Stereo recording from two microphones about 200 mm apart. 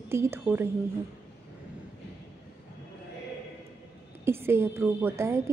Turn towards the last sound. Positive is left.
turn(degrees=-15)  # may be behind; listen again after turning